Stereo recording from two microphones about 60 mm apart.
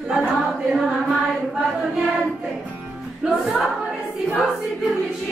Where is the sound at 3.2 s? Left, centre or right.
Centre.